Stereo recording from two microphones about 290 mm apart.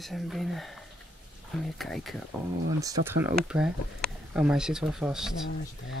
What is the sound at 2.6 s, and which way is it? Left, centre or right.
Speech, centre.